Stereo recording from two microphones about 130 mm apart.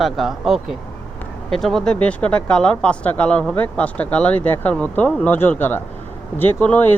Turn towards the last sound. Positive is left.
turn(degrees=10)  # may be behind; listen again after turning